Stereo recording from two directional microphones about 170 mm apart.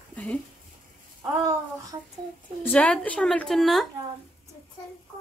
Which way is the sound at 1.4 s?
20° right (ahead or behind).